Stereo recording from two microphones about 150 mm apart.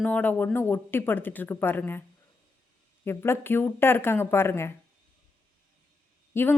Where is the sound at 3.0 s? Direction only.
15° left (ahead or behind).